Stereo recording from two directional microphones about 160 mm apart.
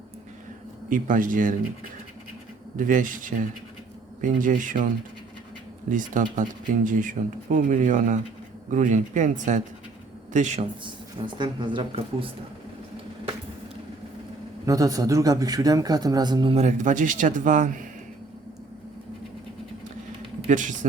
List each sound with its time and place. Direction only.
0.9 s speech: 55° right (ahead or behind)
2.7 s speech: 55° right (ahead or behind)
5.9 s speech: 55° right (ahead or behind)
10.8 s a man's voice: 30° right (ahead or behind)
14.7 s a man's voice: 20° right (ahead or behind)
16.6 s speech: 50° right (ahead or behind)
20.5 s speech: 50° right (ahead or behind)